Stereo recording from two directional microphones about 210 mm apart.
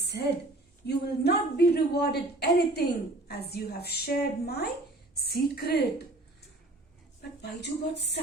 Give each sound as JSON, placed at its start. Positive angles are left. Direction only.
{"t": 0.0, "sound": "a sound", "side_deg": 50}
{"t": 0.9, "sound": "a woman's voice", "side_deg": 50}
{"t": 7.2, "sound": "speech", "side_deg": 55}